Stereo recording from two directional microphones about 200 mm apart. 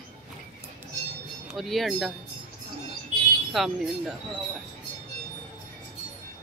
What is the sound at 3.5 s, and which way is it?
Speech, centre (ahead or behind).